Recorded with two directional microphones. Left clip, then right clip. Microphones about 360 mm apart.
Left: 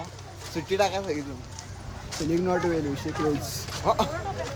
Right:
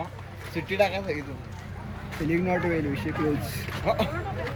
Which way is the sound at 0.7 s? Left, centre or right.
Centre.